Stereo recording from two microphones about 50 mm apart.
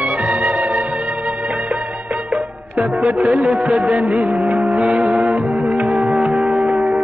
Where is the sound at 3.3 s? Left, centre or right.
Centre.